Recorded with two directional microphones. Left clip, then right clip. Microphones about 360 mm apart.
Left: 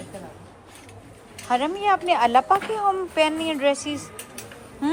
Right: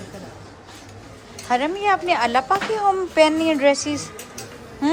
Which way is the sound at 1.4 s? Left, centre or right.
Centre.